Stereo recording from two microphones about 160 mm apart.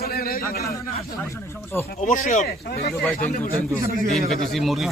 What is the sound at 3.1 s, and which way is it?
Speech, 60° left (ahead or behind).